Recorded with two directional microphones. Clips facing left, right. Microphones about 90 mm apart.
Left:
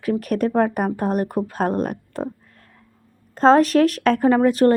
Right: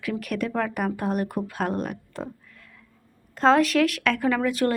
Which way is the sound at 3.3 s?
35° left (ahead or behind).